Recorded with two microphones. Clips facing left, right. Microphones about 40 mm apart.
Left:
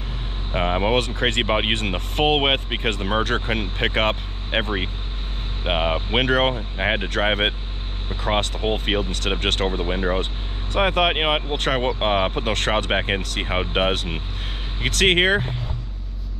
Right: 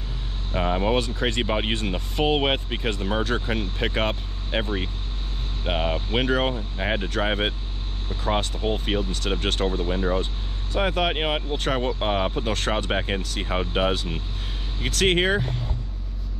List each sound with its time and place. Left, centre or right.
0.5 s speech: left
0.9 s speech: left
1.4 s speech: left
1.9 s speech: left
6.2 s speech: left
6.5 s speech: left
8.5 s speech: left
9.4 s speech: left
9.7 s speech: left
11.5 s speech: left
11.8 s speech: left
12.9 s speech: left
14.9 s speech: left